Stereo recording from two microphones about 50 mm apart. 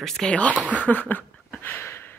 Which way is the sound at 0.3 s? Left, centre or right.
Left.